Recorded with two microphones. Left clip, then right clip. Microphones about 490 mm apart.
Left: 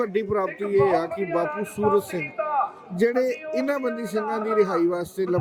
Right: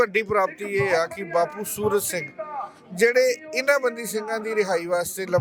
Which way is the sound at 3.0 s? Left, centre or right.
Right.